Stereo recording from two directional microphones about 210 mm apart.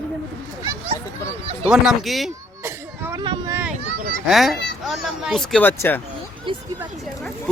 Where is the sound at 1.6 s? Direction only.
Centre (ahead or behind).